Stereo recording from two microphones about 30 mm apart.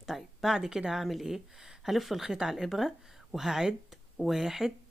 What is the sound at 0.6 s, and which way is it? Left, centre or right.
A woman's voice, right.